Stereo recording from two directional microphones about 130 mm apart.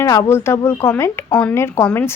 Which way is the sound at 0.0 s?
20° left (ahead or behind).